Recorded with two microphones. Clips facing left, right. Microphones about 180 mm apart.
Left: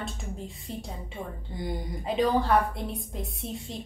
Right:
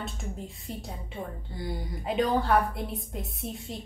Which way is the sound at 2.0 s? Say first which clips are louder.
Left 1 dB; centre (ahead or behind).